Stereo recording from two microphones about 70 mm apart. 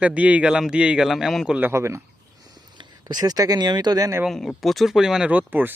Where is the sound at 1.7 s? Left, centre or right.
Right.